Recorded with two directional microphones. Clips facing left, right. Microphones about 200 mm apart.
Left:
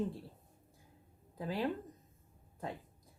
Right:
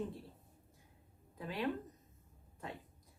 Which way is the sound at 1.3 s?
35° left (ahead or behind).